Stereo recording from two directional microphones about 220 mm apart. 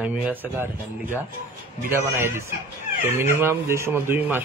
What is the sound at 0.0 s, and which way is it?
Speech, 5° right (ahead or behind).